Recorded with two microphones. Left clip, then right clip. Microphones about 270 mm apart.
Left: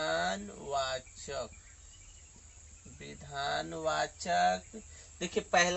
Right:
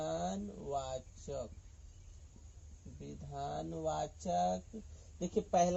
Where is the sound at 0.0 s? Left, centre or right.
Left.